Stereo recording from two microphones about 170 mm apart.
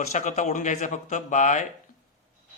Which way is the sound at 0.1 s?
45° left (ahead or behind).